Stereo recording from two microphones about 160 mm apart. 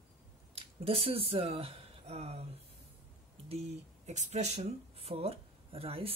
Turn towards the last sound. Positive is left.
turn(degrees=-35)  # may be behind; listen again after turning